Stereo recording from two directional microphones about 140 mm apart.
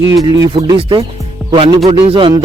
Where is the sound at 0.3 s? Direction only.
30° right (ahead or behind).